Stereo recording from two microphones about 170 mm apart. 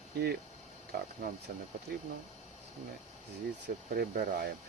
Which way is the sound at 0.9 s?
55° right (ahead or behind).